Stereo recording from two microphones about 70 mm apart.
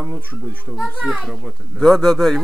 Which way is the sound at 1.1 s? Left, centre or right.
Centre.